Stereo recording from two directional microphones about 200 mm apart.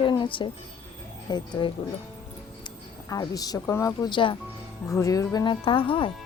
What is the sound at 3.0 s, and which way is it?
Speech, 15° left (ahead or behind).